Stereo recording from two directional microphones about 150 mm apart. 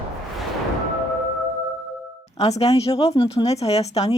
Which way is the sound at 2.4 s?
45° left (ahead or behind).